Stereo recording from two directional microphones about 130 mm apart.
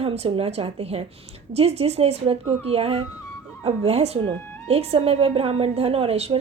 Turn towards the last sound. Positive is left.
turn(degrees=-50)  # may be behind; listen again after turning